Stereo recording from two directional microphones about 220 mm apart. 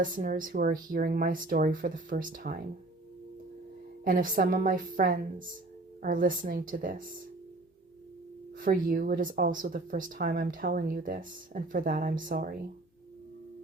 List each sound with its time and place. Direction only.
0.0 s speech: 35° right (ahead or behind)
4.0 s speech: 40° right (ahead or behind)
8.5 s speech: 40° right (ahead or behind)